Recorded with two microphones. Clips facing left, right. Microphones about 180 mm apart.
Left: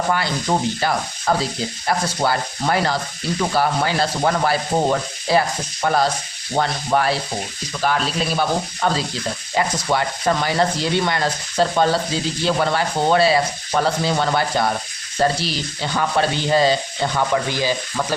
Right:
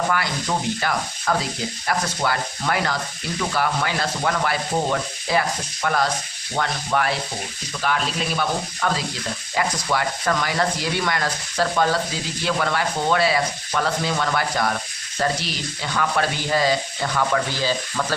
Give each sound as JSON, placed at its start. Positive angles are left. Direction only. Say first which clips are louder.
{"t": 0.1, "sound": "sanding", "louder": "left 3 dB", "side_deg": 30}